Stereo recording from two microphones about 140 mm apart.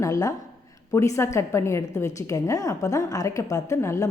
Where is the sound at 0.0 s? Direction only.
25° left (ahead or behind).